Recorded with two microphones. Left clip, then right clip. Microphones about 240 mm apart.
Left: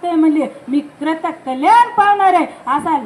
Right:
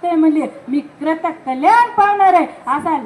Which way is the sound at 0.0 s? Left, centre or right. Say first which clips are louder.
Even; left.